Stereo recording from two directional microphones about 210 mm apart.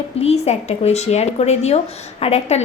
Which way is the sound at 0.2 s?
30° left (ahead or behind).